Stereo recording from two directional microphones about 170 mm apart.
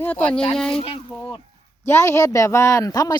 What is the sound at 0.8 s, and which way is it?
Speech, 35° left (ahead or behind).